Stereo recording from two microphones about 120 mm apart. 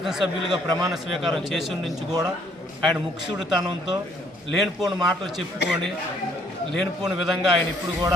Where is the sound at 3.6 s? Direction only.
35° right (ahead or behind).